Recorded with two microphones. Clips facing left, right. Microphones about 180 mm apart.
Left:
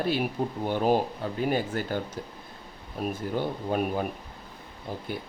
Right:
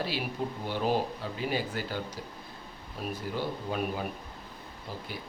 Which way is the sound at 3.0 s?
50° left (ahead or behind).